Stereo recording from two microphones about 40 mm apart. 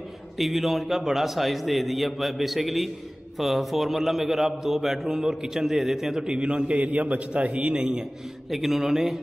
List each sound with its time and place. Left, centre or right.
0.4 s a man's voice: centre; by 6.8 s right
6.8 s a man's voice: right
7.7 s a man's voice: right
8.5 s a man's voice: centre